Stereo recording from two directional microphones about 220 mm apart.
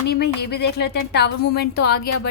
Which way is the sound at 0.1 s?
50° left (ahead or behind).